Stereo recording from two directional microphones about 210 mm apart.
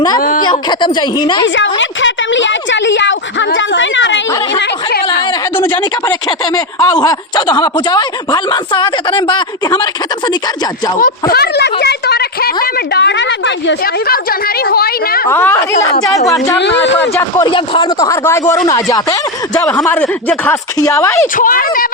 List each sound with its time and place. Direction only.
0.2 s speech: 40° left (ahead or behind)
0.4 s speech: 20° left (ahead or behind)
1.5 s a woman's voice: 60° left (ahead or behind)
4.6 s a woman's voice: 45° left (ahead or behind)
6.1 s speech: 15° left (ahead or behind)
11.0 s a woman's voice: 45° left (ahead or behind)
15.3 s speech: 10° left (ahead or behind)
16.6 s a woman's voice: 55° left (ahead or behind)
17.2 s speech: 15° left (ahead or behind)
21.3 s speech: 40° left (ahead or behind)